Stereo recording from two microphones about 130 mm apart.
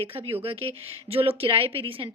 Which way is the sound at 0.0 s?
45° right (ahead or behind).